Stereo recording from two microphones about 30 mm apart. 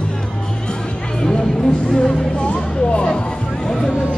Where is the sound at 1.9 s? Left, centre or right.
Left.